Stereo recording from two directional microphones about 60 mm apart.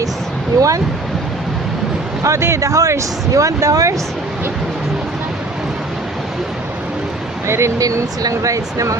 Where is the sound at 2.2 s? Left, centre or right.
Right.